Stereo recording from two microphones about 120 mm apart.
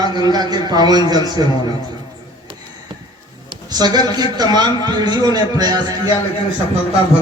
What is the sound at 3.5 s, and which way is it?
A man's voice, 35° right (ahead or behind).